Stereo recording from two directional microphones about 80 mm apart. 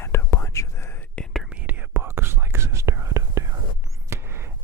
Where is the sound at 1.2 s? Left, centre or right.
Centre.